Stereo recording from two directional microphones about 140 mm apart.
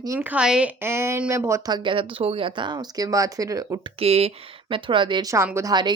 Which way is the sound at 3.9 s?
45° right (ahead or behind).